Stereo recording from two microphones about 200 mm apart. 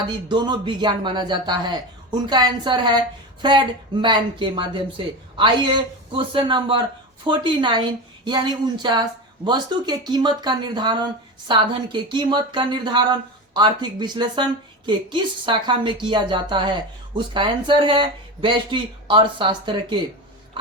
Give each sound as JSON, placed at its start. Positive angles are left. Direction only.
{"t": 0.1, "sound": "speech", "side_deg": -25}